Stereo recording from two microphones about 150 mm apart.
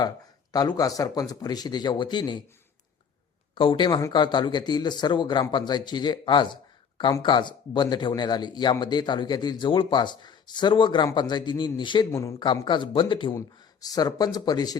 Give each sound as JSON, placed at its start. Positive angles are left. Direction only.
{"t": 0.5, "sound": "speech", "side_deg": 25}
{"t": 3.5, "sound": "a man's voice", "side_deg": 35}